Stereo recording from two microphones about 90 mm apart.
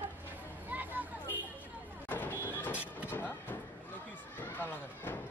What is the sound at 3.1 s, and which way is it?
Vehicle, 20° left (ahead or behind).